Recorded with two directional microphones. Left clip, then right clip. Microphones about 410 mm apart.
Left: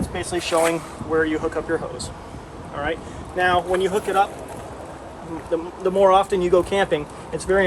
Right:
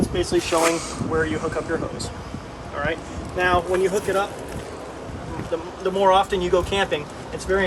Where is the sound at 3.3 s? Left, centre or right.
Centre.